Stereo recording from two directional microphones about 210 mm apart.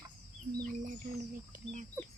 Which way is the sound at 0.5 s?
40° right (ahead or behind).